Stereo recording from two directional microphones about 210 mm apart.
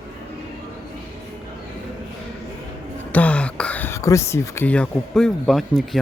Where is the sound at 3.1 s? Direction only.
5° left (ahead or behind).